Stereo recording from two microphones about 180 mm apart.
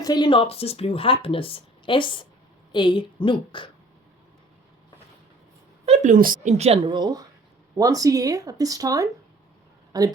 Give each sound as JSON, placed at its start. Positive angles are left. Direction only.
{"t": 0.0, "sound": "a woman's voice", "side_deg": 20}
{"t": 5.8, "sound": "speech", "side_deg": -40}